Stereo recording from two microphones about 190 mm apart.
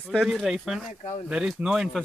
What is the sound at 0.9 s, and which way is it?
Speech, 35° left (ahead or behind).